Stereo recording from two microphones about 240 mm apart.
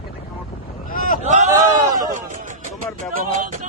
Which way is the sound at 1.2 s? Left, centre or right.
Right.